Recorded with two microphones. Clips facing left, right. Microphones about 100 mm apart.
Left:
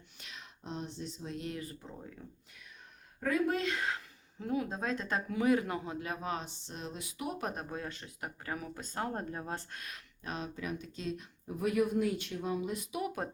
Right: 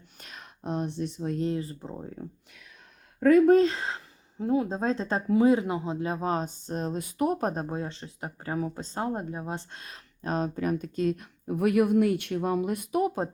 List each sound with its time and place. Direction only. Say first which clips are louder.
0.2 s speech: right 6 dB; 50° right (ahead or behind)
1.4 s speech: right 11 dB; 30° right (ahead or behind)
3.2 s speech: right 13 dB; 55° right (ahead or behind)
3.5 s speech: right 12 dB; 35° right (ahead or behind)
10.2 s speech: right 11 dB; 45° right (ahead or behind)
13.0 s speech: right 10 dB; 30° right (ahead or behind)